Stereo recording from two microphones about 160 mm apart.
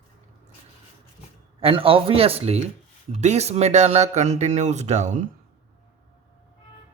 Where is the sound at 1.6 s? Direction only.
35° right (ahead or behind).